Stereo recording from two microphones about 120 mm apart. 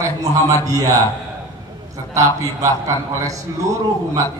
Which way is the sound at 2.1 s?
25° right (ahead or behind).